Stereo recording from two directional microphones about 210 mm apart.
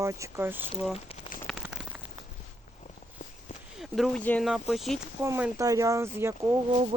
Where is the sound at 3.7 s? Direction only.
Centre (ahead or behind).